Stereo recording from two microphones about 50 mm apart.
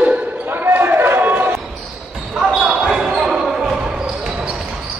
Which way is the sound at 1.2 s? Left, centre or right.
Right.